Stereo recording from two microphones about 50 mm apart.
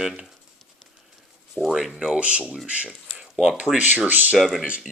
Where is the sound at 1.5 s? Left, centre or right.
Centre.